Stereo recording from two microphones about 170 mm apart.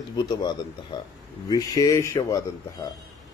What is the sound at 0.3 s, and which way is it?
Speech, 25° left (ahead or behind).